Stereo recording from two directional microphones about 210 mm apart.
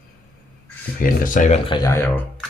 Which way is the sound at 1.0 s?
40° left (ahead or behind).